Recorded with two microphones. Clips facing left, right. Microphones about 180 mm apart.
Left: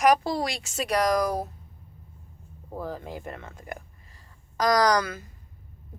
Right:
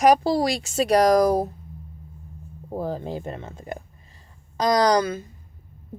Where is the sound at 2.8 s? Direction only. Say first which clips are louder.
Right 6 dB; 30° right (ahead or behind).